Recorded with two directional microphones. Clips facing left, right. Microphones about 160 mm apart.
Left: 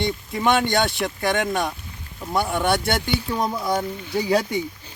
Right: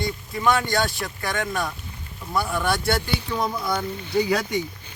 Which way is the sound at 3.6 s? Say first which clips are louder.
Left 3 dB; 40° left (ahead or behind).